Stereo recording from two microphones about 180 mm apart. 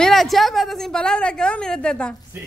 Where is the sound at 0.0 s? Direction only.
Centre (ahead or behind).